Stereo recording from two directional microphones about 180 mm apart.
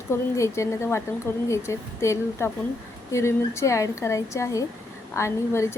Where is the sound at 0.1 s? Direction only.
15° left (ahead or behind).